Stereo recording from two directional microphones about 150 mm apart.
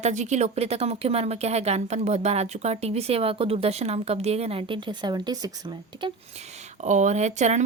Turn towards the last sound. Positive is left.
turn(degrees=-50)  # may be behind; listen again after turning